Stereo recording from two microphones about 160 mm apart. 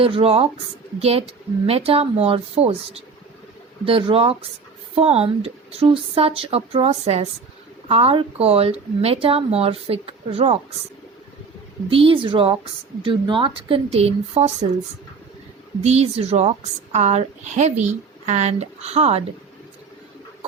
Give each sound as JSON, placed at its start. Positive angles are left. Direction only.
{"t": 0.0, "sound": "speech", "side_deg": -35}
{"t": 11.9, "sound": "speech", "side_deg": -35}
{"t": 15.8, "sound": "speech", "side_deg": -40}